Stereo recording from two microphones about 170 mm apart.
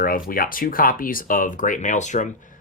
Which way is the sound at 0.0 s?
60° left (ahead or behind).